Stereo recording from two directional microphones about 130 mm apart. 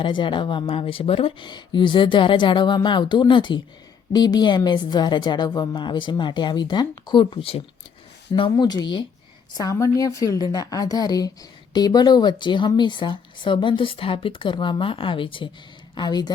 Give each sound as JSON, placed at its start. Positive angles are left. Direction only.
{"t": 0.0, "sound": "speech", "side_deg": 35}
{"t": 8.3, "sound": "a woman's voice", "side_deg": 35}